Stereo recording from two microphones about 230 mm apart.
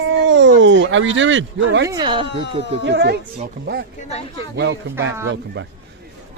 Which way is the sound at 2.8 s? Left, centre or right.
Right.